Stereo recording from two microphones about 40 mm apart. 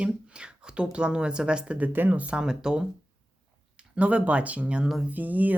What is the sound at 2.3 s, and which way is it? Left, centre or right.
Speech, centre.